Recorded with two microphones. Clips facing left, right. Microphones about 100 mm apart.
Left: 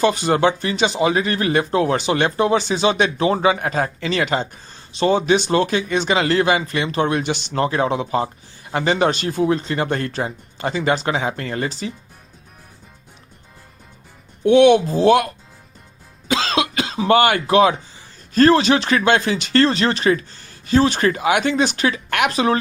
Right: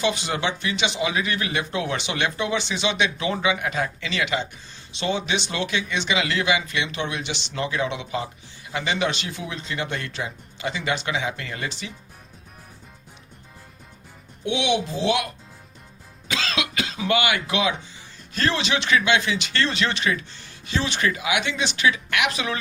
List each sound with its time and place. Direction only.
0.0 s speech: 45° left (ahead or behind)
14.4 s speech: 50° left (ahead or behind)
16.3 s speech: 35° left (ahead or behind)